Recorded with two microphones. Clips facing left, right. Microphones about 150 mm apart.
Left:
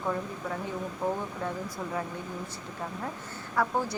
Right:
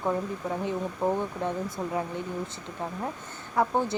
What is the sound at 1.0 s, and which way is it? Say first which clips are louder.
Speech: right 4 dB; 25° right (ahead or behind).